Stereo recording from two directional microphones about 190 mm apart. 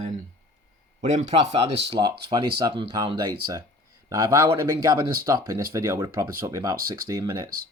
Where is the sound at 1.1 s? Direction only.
35° right (ahead or behind).